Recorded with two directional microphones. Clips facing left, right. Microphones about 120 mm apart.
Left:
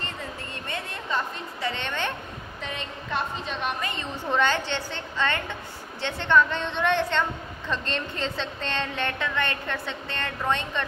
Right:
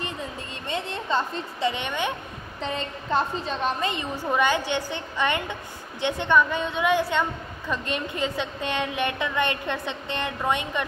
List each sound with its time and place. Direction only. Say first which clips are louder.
0.7 s a woman's voice: right 5 dB; 25° right (ahead or behind)
1.7 s a woman's voice: even; 15° right (ahead or behind)
2.6 s a woman's voice: right 6 dB; 35° right (ahead or behind)
3.9 s a woman's voice: right 1 dB; 15° right (ahead or behind)